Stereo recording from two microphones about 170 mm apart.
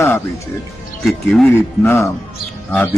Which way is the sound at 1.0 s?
5° left (ahead or behind).